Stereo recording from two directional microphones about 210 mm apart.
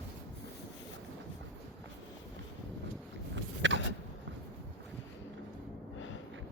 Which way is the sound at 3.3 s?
60° right (ahead or behind).